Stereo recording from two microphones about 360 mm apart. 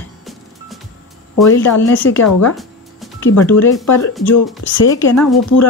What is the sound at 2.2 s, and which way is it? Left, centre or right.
Speech, left.